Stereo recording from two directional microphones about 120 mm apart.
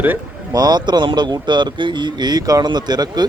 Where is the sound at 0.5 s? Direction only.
35° right (ahead or behind).